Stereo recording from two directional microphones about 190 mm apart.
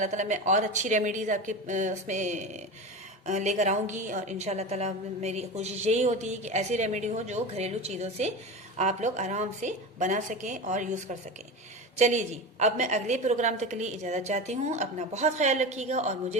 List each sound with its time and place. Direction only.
0.0 s a woman's voice: 40° right (ahead or behind)